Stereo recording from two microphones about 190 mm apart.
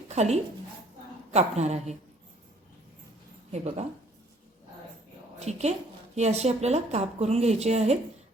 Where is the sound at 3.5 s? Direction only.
35° right (ahead or behind).